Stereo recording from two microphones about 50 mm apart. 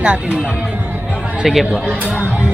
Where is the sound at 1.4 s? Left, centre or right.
Centre.